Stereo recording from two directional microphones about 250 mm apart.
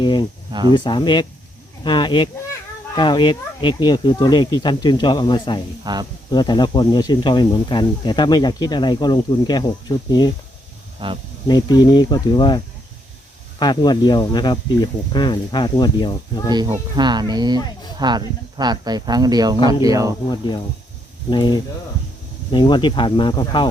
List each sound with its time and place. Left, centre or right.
0.0 s a sound: centre
0.7 s speech: centre
5.8 s speech: centre
6.3 s speech: centre
11.0 s speech: centre
11.4 s speech: centre
16.5 s speech: centre
20.3 s speech: centre